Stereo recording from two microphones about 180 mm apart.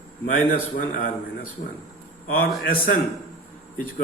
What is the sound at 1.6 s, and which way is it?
A man's voice, 50° left (ahead or behind).